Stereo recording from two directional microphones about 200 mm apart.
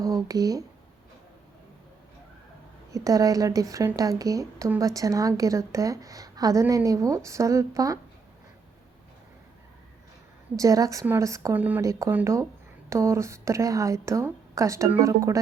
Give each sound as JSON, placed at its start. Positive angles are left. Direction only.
{"t": 0.0, "sound": "speech", "side_deg": -15}
{"t": 2.9, "sound": "speech", "side_deg": -15}
{"t": 10.6, "sound": "speech", "side_deg": -15}